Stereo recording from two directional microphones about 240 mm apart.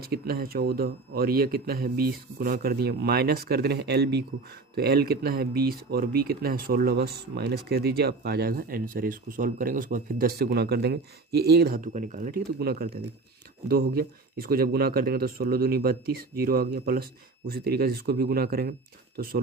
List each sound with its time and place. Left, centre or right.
0.1 s speech: right